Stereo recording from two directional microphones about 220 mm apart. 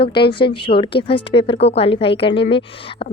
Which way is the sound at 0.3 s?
20° left (ahead or behind).